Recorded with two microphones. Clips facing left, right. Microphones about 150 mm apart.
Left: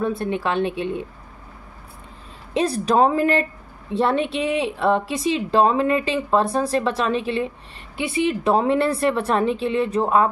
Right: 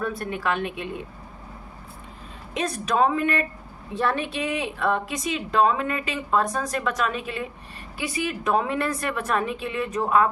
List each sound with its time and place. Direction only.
0.0 s a woman's voice: 25° left (ahead or behind)
2.5 s a woman's voice: 30° left (ahead or behind)